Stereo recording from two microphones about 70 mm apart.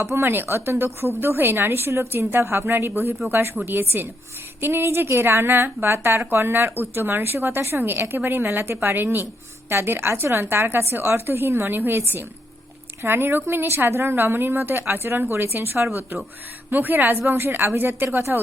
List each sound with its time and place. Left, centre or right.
0.0 s a woman's voice: right